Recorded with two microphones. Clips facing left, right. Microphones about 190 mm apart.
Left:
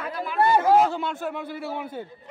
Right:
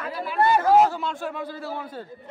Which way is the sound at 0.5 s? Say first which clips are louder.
Right 1 dB; 20° left (ahead or behind).